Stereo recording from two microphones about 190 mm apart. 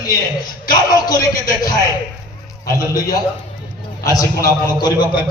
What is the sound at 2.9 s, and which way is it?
A man's voice, 20° left (ahead or behind).